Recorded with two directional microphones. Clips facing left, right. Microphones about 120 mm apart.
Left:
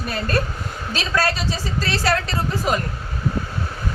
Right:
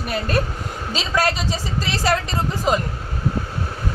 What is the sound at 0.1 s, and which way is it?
A woman's voice, 15° right (ahead or behind).